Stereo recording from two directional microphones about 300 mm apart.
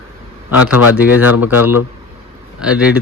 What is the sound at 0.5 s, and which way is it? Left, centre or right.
Speech, left.